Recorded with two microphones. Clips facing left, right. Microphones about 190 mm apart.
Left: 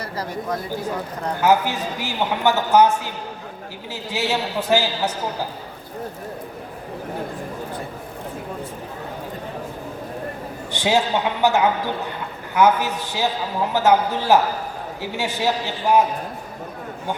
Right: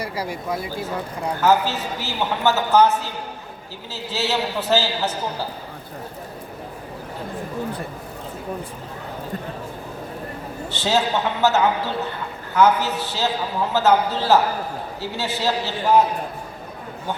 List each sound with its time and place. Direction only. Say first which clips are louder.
0.0 s speech: right 1 dB; 10° right (ahead or behind)
1.4 s a man's voice: left 1 dB; 15° left (ahead or behind)
10.7 s a man's voice: left 1 dB; 15° left (ahead or behind)